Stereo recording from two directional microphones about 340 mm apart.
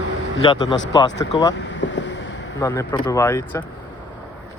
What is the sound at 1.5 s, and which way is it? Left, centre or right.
Boat, left.